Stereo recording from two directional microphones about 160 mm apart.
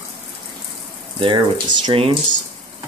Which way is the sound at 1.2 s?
30° right (ahead or behind).